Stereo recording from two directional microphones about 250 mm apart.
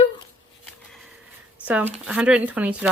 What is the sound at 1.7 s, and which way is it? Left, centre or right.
Speech, centre.